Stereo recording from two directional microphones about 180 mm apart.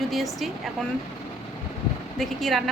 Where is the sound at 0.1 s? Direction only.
Centre (ahead or behind).